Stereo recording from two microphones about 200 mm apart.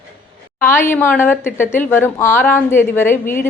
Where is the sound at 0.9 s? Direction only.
10° left (ahead or behind).